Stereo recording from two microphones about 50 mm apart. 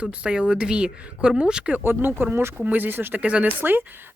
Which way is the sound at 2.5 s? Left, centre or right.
Right.